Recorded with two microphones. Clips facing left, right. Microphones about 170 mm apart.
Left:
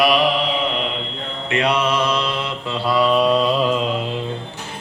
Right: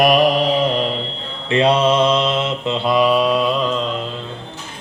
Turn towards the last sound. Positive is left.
turn(degrees=0)  # may be behind; listen again after turning